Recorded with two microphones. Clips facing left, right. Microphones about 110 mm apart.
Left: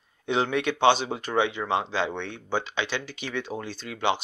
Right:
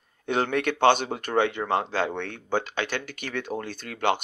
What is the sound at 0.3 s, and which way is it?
Speech, 50° right (ahead or behind).